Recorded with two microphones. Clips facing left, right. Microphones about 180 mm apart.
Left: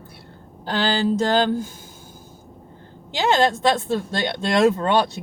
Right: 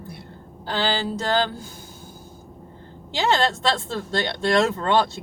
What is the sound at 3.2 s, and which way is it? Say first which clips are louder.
Speech: left 3 dB; 20° left (ahead or behind).